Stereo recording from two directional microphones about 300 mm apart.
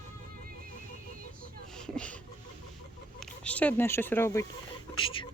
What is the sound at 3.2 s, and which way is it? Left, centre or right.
Speech, centre.